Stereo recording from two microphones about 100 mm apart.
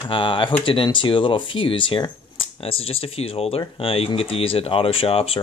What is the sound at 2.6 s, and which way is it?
Speech, 70° left (ahead or behind).